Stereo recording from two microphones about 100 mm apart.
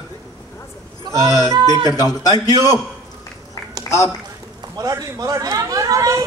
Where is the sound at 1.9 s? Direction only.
40° left (ahead or behind).